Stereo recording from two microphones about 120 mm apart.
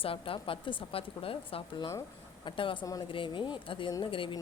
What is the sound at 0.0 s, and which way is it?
Speech, 50° left (ahead or behind).